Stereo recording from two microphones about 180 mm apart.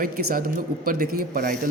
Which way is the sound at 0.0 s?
55° right (ahead or behind).